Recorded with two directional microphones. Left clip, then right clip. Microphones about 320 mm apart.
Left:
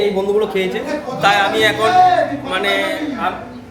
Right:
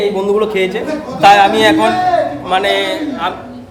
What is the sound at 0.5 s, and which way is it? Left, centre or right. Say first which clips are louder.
A man's voice: right 3 dB; right.